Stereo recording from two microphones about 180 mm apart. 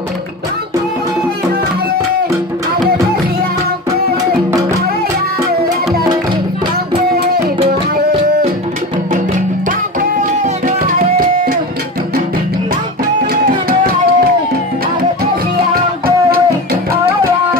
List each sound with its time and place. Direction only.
9.7 s tabla: 50° right (ahead or behind)
13.3 s music: 55° right (ahead or behind)